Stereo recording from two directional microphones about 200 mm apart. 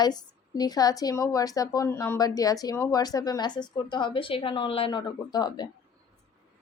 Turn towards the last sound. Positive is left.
turn(degrees=20)  # may be behind; listen again after turning